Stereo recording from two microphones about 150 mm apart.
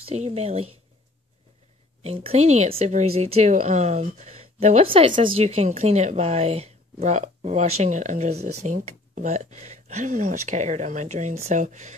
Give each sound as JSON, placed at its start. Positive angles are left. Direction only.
{"t": 0.0, "sound": "speech", "side_deg": -45}
{"t": 2.0, "sound": "a woman's voice", "side_deg": -40}